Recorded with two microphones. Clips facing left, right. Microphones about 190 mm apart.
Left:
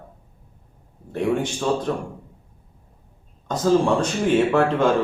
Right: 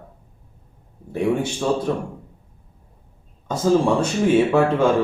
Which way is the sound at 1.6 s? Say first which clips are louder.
Right 2 dB; 5° right (ahead or behind).